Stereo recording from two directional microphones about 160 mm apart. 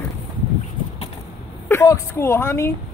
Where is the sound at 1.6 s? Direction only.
15° left (ahead or behind).